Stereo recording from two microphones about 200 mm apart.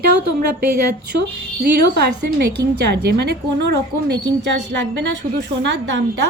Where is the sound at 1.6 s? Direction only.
55° right (ahead or behind).